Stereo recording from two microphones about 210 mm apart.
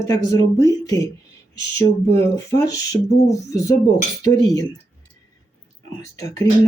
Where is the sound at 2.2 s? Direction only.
15° left (ahead or behind).